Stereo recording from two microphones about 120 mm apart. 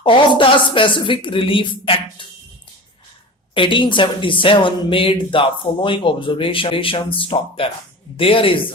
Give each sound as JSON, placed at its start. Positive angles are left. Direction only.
{"t": 0.0, "sound": "speech", "side_deg": 45}
{"t": 3.5, "sound": "speech", "side_deg": 45}